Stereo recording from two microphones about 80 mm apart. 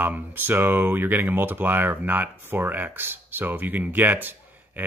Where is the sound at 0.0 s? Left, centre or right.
Right.